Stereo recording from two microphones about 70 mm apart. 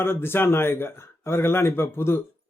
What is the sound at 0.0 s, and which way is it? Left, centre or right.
A man's voice, left.